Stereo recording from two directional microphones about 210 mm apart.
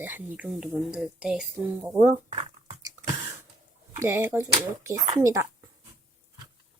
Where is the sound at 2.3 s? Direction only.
35° right (ahead or behind).